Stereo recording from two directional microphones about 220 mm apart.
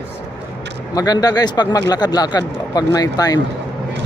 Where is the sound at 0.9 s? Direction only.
15° left (ahead or behind).